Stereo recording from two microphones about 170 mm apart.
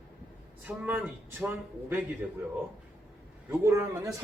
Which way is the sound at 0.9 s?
10° right (ahead or behind).